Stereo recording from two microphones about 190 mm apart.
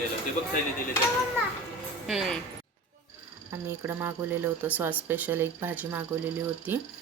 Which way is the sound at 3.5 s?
10° right (ahead or behind).